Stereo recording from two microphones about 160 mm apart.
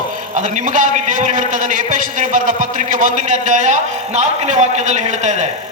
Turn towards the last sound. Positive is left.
turn(degrees=-45)  # may be behind; listen again after turning